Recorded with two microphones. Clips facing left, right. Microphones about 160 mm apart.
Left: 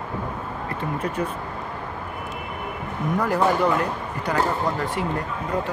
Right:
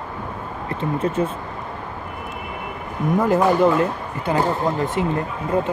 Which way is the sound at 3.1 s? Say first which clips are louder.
Right 4 dB; 20° right (ahead or behind).